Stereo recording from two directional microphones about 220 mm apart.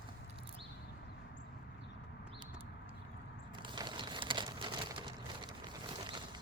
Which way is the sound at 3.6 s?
20° right (ahead or behind).